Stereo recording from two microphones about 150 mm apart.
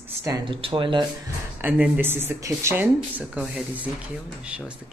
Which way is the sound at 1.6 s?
10° right (ahead or behind).